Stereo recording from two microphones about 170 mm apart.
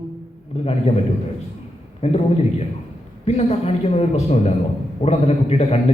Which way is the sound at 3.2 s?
40° left (ahead or behind).